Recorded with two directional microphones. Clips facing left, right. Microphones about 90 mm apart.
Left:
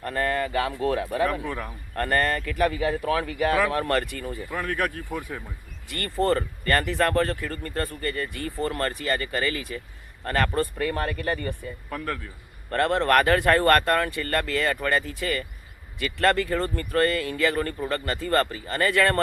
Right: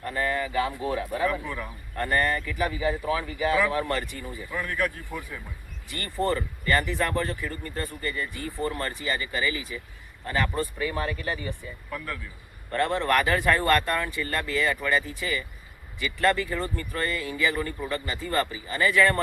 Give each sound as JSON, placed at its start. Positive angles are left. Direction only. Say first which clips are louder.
{"t": 0.0, "sound": "speech", "louder": "left 2 dB", "side_deg": 50}